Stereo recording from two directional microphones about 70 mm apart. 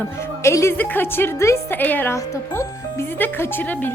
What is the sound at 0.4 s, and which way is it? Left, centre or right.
Speech, left.